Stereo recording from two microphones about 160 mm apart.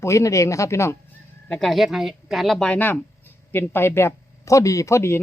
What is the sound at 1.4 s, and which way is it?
Speech, 5° left (ahead or behind).